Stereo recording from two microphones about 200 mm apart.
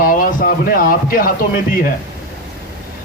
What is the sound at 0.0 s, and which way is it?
Speech, 45° left (ahead or behind).